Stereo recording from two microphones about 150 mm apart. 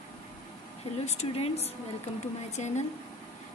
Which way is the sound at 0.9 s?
45° left (ahead or behind).